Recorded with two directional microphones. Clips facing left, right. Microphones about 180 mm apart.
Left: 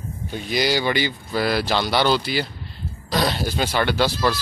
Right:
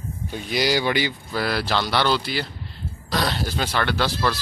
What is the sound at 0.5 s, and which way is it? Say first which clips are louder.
Speech: even; 5° left (ahead or behind).